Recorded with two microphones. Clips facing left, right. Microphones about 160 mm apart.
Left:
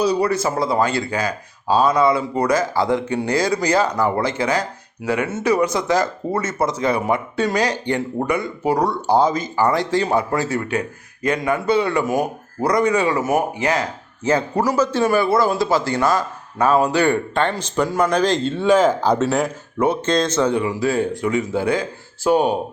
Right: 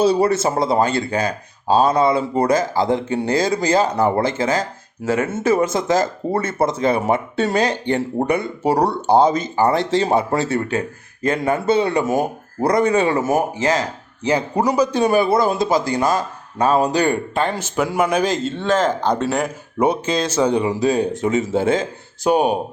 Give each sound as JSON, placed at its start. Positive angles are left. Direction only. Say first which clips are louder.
{"t": 0.0, "sound": "speech", "louder": "right 3 dB", "side_deg": -25}
{"t": 4.2, "sound": "speech", "louder": "right 1 dB", "side_deg": -45}
{"t": 6.2, "sound": "speech", "louder": "right 2 dB", "side_deg": -30}
{"t": 14.3, "sound": "speech", "louder": "even", "side_deg": -15}
{"t": 18.6, "sound": "speech", "louder": "left 3 dB", "side_deg": 10}
{"t": 19.8, "sound": "speech", "louder": "even", "side_deg": -15}